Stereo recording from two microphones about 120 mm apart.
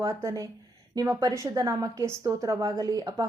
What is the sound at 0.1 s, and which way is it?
A woman's voice, 25° right (ahead or behind).